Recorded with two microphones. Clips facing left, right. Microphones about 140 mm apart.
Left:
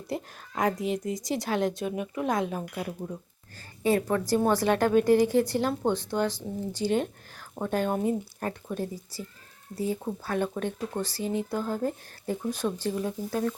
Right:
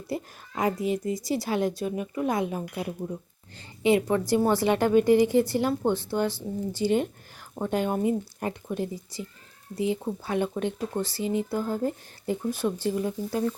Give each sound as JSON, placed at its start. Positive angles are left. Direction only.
{"t": 0.1, "sound": "a woman's voice", "side_deg": -5}
{"t": 5.8, "sound": "speech", "side_deg": 15}
{"t": 6.1, "sound": "speech", "side_deg": -10}
{"t": 10.2, "sound": "speech", "side_deg": -15}